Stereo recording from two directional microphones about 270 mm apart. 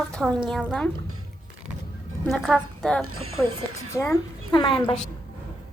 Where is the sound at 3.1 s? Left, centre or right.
Right.